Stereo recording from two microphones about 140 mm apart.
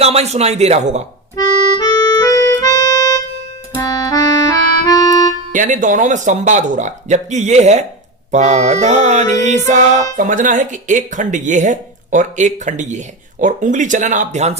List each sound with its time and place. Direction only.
0.0 s speech: 50° right (ahead or behind)
1.4 s accordion: 30° left (ahead or behind)
5.5 s speech: 65° right (ahead or behind)
10.2 s speech: 70° right (ahead or behind)